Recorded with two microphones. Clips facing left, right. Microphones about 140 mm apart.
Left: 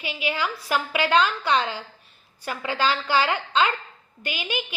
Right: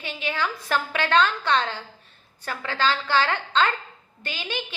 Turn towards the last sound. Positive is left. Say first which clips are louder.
# left 2 dB
turn(degrees=15)  # may be behind; listen again after turning